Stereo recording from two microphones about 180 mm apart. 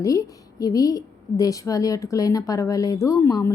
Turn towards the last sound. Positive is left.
turn(degrees=15)  # may be behind; listen again after turning